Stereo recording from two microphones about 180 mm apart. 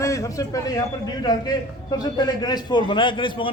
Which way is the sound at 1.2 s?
25° left (ahead or behind).